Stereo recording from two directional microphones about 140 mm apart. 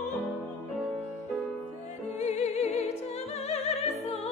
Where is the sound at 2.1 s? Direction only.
55° left (ahead or behind).